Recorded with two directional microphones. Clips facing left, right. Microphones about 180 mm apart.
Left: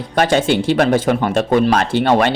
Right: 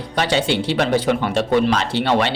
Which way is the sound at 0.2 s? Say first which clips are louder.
Left 4 dB; 50° left (ahead or behind).